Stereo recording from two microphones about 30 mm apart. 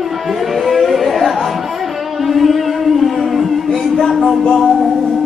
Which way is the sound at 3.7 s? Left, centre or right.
Centre.